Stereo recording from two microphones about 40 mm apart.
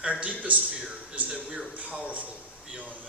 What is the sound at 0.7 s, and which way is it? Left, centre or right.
A man's voice, right.